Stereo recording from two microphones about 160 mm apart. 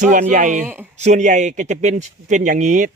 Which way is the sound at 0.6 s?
15° right (ahead or behind).